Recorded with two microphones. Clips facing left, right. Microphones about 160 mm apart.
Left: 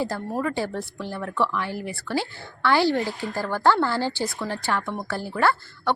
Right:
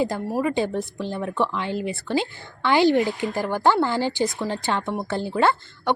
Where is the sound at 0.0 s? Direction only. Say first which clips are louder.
Right 3 dB; 15° right (ahead or behind).